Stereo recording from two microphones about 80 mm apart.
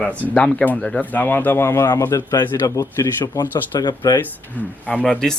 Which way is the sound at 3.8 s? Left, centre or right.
Left.